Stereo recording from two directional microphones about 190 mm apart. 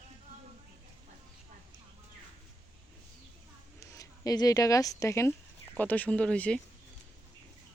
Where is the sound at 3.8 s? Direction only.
20° left (ahead or behind).